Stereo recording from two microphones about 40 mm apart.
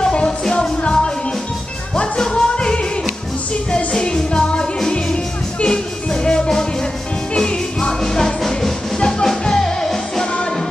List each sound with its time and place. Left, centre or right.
0.0 s music: centre
2.3 s music: left